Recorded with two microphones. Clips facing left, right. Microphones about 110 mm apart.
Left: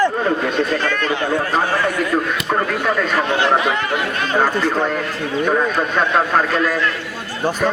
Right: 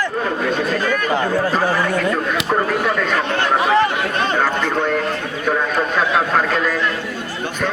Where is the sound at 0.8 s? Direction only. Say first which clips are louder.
Right 1 dB; 10° right (ahead or behind).